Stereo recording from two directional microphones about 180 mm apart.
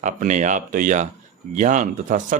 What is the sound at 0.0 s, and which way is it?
Speech, 45° right (ahead or behind).